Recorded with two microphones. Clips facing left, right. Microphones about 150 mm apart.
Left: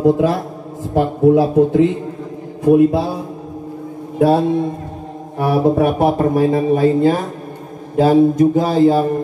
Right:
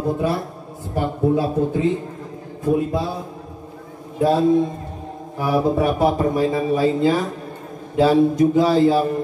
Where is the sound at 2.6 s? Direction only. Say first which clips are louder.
Left 8 dB; 75° left (ahead or behind).